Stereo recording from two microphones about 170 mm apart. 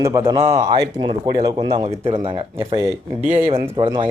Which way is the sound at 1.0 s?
25° right (ahead or behind).